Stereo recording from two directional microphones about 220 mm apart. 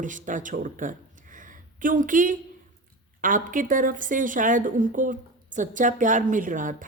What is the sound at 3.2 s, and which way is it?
A woman's voice, 35° right (ahead or behind).